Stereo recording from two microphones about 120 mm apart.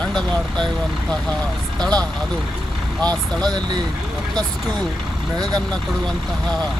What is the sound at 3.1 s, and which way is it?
Speech, 35° right (ahead or behind).